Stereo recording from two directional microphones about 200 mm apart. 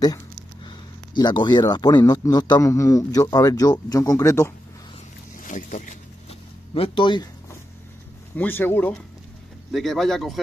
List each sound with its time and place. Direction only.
0.7 s speech: 20° left (ahead or behind)
5.4 s speech: 40° left (ahead or behind)
6.7 s speech: 25° left (ahead or behind)
8.4 s speech: 10° left (ahead or behind)